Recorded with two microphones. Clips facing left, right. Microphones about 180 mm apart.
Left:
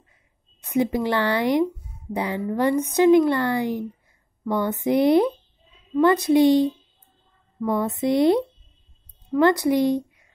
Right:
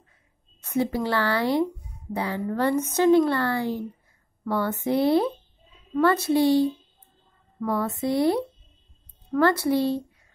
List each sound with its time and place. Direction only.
0.6 s speech: 15° left (ahead or behind)
5.9 s a sound: 15° left (ahead or behind)
9.4 s speech: 15° left (ahead or behind)